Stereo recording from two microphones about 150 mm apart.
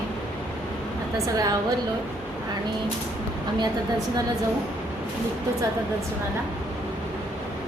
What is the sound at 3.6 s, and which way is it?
Speech, 25° right (ahead or behind).